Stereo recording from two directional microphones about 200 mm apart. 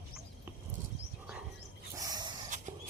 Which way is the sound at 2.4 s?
40° right (ahead or behind).